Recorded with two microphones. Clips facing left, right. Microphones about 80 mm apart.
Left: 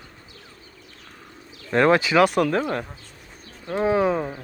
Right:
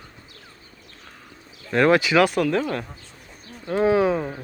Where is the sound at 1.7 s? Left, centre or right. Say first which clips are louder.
Even; centre.